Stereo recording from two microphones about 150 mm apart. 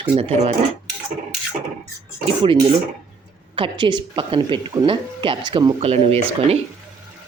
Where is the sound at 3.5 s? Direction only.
35° right (ahead or behind).